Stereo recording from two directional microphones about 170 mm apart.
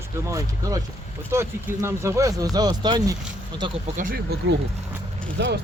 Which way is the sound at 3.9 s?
55° right (ahead or behind).